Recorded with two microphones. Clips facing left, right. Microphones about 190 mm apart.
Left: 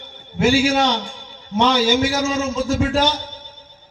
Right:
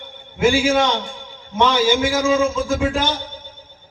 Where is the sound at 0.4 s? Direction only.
50° right (ahead or behind).